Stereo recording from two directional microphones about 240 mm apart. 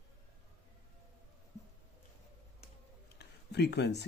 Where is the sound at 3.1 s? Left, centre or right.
Left.